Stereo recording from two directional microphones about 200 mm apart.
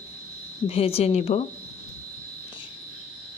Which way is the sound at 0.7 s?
30° left (ahead or behind).